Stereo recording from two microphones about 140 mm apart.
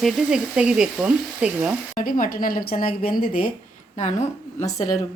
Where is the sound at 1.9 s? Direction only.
75° left (ahead or behind).